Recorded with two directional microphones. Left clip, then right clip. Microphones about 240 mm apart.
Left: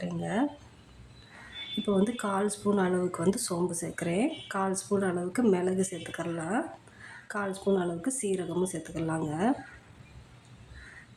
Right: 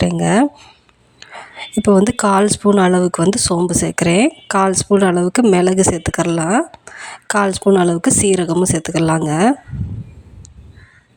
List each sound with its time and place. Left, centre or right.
0.0 s speech: right
1.2 s whispering: right
1.8 s speech: right